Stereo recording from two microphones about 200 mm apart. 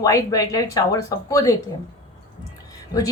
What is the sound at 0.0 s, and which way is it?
Speech, 15° left (ahead or behind).